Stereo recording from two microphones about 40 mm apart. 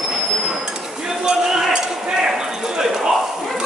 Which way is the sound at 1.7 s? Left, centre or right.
Centre.